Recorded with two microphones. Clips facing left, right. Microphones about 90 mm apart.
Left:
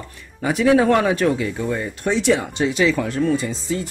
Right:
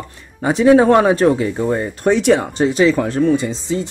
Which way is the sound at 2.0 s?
55° right (ahead or behind).